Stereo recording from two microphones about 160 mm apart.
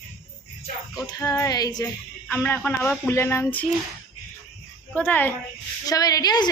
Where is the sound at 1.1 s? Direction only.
20° left (ahead or behind).